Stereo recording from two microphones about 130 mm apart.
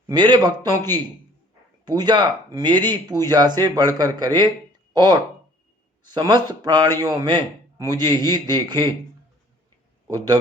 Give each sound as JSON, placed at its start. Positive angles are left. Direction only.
{"t": 0.1, "sound": "a man's voice", "side_deg": -35}
{"t": 10.1, "sound": "a man's voice", "side_deg": -30}